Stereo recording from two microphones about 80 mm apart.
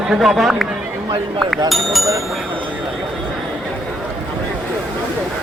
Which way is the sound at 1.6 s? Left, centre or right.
Centre.